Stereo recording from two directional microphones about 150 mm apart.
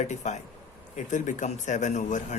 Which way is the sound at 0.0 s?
50° left (ahead or behind).